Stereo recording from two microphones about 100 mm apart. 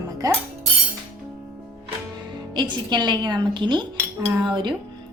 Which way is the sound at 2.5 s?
50° right (ahead or behind).